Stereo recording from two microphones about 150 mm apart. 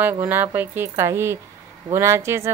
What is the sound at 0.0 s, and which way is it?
A woman's voice, 15° right (ahead or behind).